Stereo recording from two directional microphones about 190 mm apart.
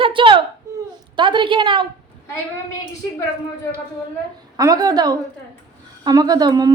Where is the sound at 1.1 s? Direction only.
25° right (ahead or behind).